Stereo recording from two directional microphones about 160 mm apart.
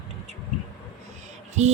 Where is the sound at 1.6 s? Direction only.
45° right (ahead or behind).